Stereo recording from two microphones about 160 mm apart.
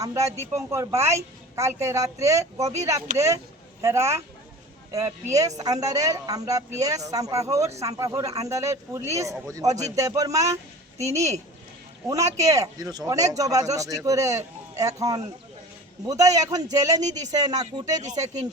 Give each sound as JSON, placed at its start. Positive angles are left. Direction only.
{"t": 0.0, "sound": "a man's voice", "side_deg": -20}